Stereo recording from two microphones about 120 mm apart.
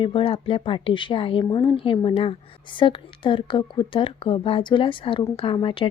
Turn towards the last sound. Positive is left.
turn(degrees=45)  # may be behind; listen again after turning